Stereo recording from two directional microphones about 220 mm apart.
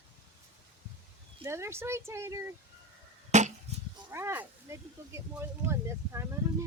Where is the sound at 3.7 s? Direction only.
30° right (ahead or behind).